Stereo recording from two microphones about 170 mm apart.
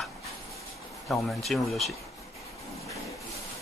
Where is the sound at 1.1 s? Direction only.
Centre (ahead or behind).